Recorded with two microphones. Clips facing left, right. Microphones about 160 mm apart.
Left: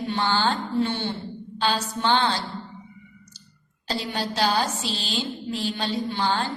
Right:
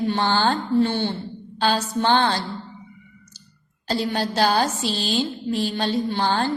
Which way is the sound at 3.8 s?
50° right (ahead or behind).